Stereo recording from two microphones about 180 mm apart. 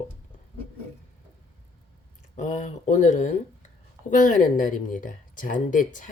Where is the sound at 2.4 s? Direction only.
40° left (ahead or behind).